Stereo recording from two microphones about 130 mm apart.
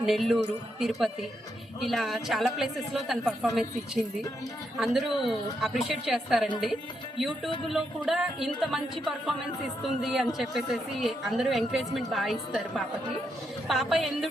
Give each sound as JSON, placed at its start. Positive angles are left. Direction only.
{"t": 0.0, "sound": "a woman's voice", "side_deg": 0}
{"t": 4.8, "sound": "a woman's voice", "side_deg": 0}